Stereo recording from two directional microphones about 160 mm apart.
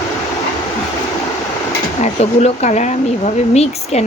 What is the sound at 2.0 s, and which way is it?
Speech, 45° left (ahead or behind).